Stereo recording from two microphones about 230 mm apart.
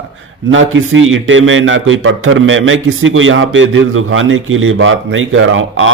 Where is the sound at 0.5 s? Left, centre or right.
Right.